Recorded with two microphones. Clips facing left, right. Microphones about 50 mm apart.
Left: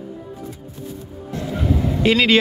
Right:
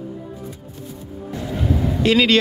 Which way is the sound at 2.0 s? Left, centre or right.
Centre.